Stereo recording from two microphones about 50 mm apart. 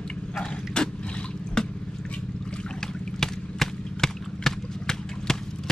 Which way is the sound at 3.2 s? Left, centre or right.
Centre.